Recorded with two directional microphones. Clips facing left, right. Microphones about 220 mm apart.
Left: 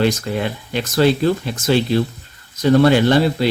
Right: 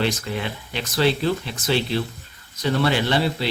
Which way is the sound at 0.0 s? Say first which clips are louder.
Left 6 dB; 45° left (ahead or behind).